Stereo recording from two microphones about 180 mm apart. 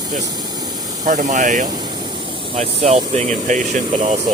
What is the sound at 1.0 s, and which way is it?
Speech, 45° right (ahead or behind).